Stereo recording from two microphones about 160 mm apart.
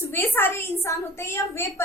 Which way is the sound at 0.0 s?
15° left (ahead or behind).